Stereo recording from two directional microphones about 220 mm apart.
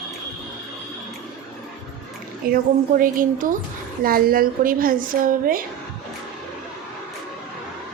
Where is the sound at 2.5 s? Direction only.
40° right (ahead or behind).